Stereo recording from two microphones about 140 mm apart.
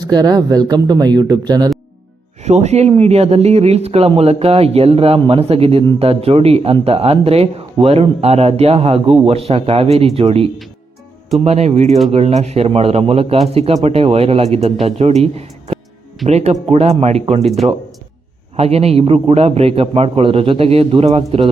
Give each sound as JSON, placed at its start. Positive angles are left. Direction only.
{"t": 0.0, "sound": "speech", "side_deg": -30}
{"t": 2.4, "sound": "speech", "side_deg": -50}
{"t": 11.9, "sound": "speech", "side_deg": 0}
{"t": 12.1, "sound": "speech", "side_deg": -50}
{"t": 17.6, "sound": "speech", "side_deg": -25}
{"t": 18.5, "sound": "speech", "side_deg": -45}